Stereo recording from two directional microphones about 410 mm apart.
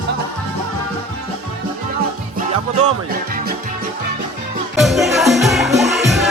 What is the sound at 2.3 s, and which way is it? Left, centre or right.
Music, centre.